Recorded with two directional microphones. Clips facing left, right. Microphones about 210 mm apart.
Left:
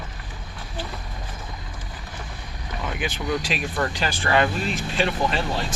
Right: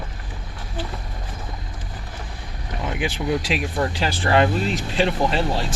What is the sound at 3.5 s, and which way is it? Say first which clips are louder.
Speech: right 3 dB; 25° right (ahead or behind).